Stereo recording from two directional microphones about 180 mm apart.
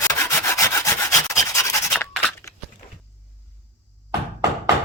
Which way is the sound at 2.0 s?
15° left (ahead or behind).